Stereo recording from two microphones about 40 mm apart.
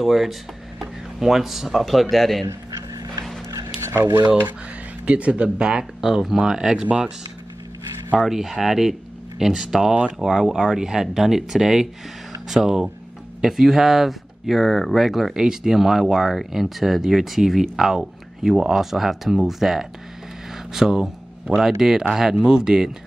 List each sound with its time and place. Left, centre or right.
0.0 s speech: centre
3.9 s speech: right
5.0 s speech: right
5.9 s speech: centre
8.3 s speech: centre
15.3 s speech: centre